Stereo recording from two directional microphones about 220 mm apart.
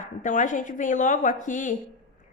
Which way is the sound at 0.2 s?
35° left (ahead or behind).